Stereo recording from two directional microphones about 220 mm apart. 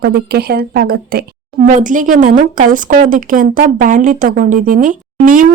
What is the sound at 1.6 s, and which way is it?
Speech, 35° right (ahead or behind).